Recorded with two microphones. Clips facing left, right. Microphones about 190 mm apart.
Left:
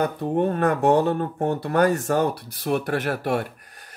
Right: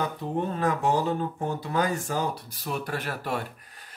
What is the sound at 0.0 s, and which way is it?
Speech, 60° left (ahead or behind).